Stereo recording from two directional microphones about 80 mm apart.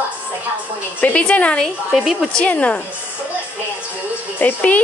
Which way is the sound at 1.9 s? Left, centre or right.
Centre.